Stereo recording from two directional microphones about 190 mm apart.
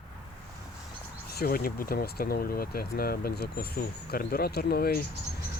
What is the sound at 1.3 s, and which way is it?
Speech, 55° left (ahead or behind).